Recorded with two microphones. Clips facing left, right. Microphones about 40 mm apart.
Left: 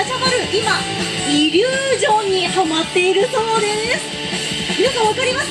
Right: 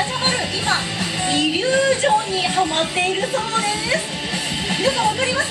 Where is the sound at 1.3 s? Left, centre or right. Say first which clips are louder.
Left 4 dB; centre.